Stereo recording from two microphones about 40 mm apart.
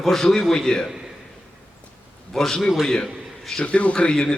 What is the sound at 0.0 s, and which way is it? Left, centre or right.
Speech, centre.